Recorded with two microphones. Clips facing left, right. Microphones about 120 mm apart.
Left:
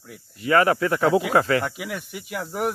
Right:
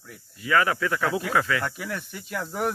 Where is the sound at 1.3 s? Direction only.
40° left (ahead or behind).